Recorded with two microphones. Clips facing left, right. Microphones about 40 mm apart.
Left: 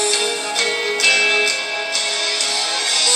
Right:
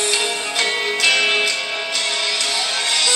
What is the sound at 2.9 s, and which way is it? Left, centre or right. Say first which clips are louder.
Music: right 1 dB; centre.